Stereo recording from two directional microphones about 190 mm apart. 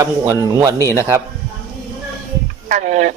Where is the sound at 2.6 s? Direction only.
40° right (ahead or behind).